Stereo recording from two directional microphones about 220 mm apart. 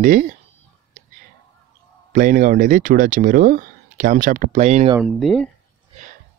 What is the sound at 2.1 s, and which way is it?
Speech, 35° right (ahead or behind).